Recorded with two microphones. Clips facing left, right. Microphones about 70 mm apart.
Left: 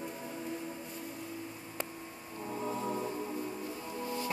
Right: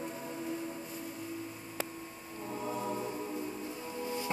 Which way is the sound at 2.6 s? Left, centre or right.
Centre.